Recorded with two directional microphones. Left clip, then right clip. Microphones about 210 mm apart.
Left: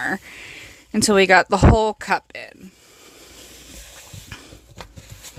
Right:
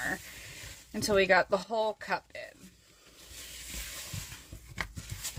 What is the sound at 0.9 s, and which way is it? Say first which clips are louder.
Speech: left 11 dB; 50° left (ahead or behind).